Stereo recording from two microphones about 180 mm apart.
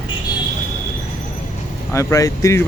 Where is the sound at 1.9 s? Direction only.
15° left (ahead or behind).